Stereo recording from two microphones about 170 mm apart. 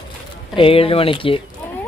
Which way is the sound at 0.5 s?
30° left (ahead or behind).